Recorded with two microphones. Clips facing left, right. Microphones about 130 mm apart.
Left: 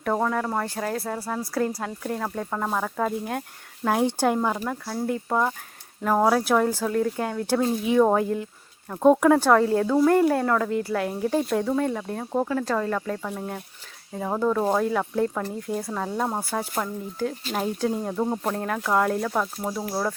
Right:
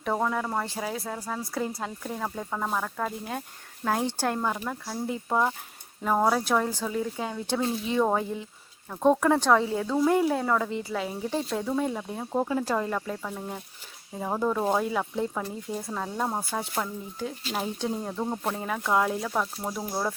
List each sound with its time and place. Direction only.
0.0 s a woman's voice: centre (ahead or behind)
4.6 s a woman's voice: centre (ahead or behind)
6.0 s a woman's voice: centre (ahead or behind)
7.6 s speech: 45° left (ahead or behind)
8.1 s a woman's voice: centre (ahead or behind)
12.5 s speech: 15° right (ahead or behind)
13.2 s a woman's voice: 5° left (ahead or behind)
18.5 s a woman's voice: centre (ahead or behind)